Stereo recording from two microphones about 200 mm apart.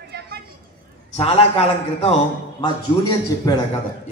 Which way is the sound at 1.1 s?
30° left (ahead or behind).